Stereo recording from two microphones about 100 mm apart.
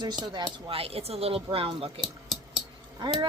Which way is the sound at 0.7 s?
75° right (ahead or behind).